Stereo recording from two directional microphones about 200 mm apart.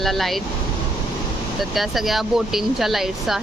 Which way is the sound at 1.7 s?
Centre (ahead or behind).